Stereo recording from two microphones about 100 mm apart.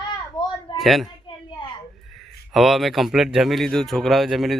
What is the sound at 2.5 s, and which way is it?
Speech, centre (ahead or behind).